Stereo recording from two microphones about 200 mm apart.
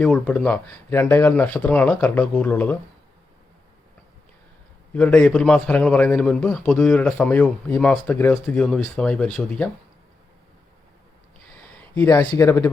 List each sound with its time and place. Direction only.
0.0 s speech: 5° left (ahead or behind)
4.9 s speech: 5° left (ahead or behind)
12.0 s speech: 20° left (ahead or behind)